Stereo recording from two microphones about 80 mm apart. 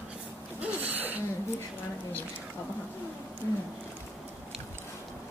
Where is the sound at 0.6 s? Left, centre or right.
Right.